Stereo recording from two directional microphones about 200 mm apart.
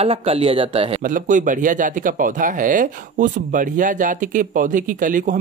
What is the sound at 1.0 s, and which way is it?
Speech, 40° right (ahead or behind).